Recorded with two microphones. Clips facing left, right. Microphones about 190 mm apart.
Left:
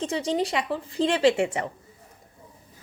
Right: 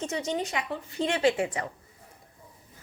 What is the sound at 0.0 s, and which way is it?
A woman's voice, 30° left (ahead or behind).